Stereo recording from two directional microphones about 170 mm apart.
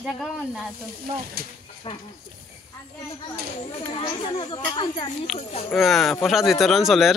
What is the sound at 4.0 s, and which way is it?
Speech, 30° left (ahead or behind).